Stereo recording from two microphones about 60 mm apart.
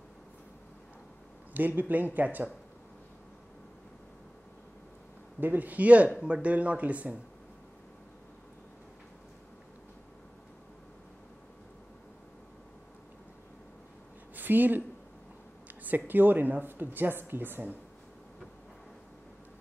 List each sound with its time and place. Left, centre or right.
1.5 s speech: right
5.4 s speech: right
14.3 s a sound: right
15.8 s speech: right